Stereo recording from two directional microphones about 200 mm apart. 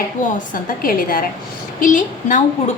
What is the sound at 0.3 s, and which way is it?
A woman's voice, 45° left (ahead or behind).